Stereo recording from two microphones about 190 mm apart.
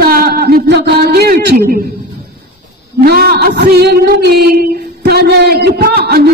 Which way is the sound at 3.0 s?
55° right (ahead or behind).